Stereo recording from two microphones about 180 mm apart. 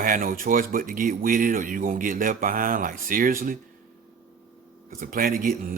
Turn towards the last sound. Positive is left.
turn(degrees=-50)  # may be behind; listen again after turning